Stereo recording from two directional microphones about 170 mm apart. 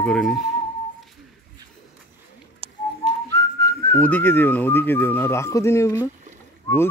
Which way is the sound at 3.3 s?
15° left (ahead or behind).